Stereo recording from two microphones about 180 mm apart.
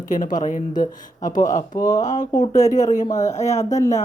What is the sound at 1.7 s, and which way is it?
Speech, 20° left (ahead or behind).